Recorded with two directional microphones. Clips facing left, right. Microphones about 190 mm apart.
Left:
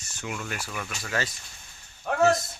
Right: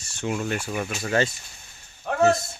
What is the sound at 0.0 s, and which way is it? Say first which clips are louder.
Speech: right 8 dB; 30° right (ahead or behind).